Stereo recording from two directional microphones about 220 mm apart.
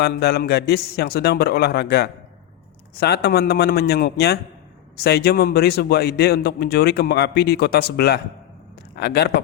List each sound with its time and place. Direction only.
0.0 s speech: 45° left (ahead or behind)